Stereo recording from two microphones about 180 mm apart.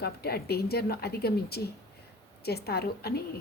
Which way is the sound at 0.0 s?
60° left (ahead or behind).